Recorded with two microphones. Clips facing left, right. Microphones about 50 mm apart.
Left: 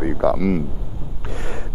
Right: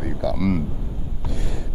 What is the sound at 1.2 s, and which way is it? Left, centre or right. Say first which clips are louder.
Gasp: left 2 dB; left.